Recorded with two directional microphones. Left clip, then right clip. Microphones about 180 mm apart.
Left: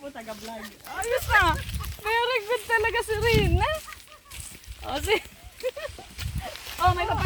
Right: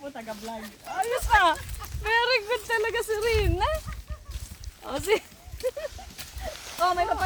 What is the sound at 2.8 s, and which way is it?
Speech, 30° left (ahead or behind).